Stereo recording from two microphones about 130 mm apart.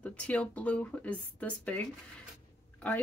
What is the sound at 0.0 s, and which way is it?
Speech, 10° left (ahead or behind).